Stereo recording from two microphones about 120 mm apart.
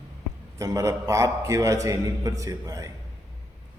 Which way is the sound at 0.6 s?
25° right (ahead or behind).